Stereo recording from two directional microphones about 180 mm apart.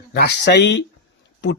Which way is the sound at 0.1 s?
65° left (ahead or behind).